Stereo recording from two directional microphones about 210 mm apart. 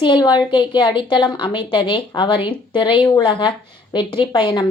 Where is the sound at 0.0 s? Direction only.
20° left (ahead or behind).